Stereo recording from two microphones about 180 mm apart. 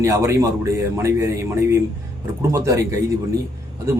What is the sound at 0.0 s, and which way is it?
A man's voice, 15° right (ahead or behind).